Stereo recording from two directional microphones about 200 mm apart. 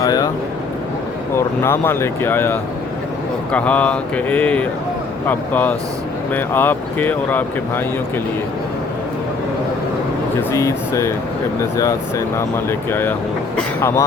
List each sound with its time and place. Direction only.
0.0 s speech: 20° left (ahead or behind)
1.4 s speech: 10° left (ahead or behind)
10.5 s speech: 15° left (ahead or behind)